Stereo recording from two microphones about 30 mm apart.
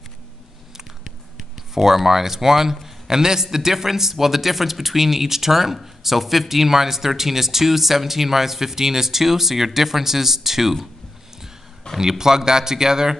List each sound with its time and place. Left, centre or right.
1.7 s speech: centre
12.0 s speech: centre